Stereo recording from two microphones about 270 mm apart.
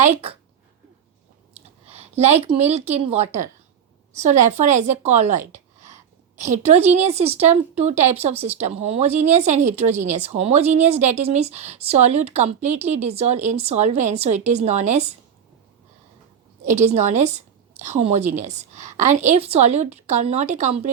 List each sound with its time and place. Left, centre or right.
1.9 s a woman's voice: right
16.6 s speech: right